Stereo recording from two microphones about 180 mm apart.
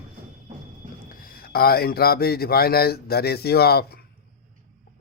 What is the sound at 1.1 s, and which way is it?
Speech, 55° left (ahead or behind).